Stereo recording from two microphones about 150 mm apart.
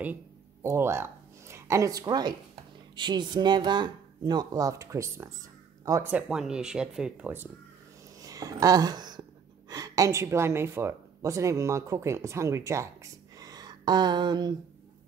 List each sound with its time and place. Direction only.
0.0 s a woman's voice: 15° right (ahead or behind)
6.1 s speech: 5° right (ahead or behind)
8.2 s speech: 25° right (ahead or behind)